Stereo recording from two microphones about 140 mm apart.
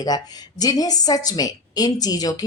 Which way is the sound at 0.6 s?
25° left (ahead or behind).